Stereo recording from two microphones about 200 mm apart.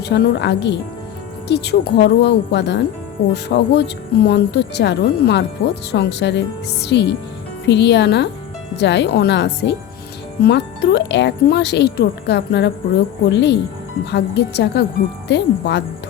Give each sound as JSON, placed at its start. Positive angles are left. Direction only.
{"t": 0.0, "sound": "speech", "side_deg": 55}